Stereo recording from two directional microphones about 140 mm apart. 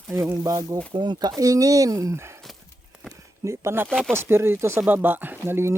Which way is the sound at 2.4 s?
Centre (ahead or behind).